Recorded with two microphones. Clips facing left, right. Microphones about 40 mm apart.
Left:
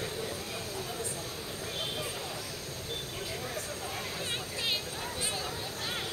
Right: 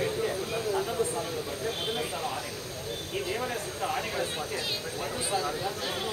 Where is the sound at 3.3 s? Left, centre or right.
Right.